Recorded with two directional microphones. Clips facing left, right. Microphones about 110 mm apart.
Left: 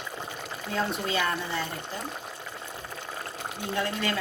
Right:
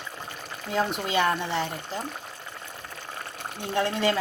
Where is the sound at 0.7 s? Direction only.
20° right (ahead or behind).